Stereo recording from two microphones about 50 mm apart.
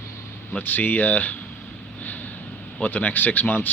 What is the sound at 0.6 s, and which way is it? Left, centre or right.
Speech, left.